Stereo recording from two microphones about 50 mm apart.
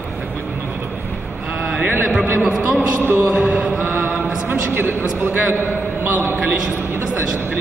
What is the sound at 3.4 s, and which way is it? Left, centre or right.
Chant, right.